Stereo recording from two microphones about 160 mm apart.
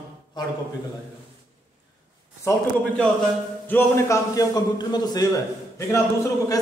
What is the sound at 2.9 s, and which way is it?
A man's voice, 5° left (ahead or behind).